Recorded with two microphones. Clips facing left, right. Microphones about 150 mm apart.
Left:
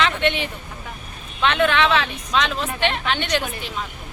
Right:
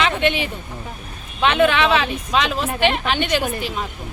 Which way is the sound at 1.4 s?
5° right (ahead or behind).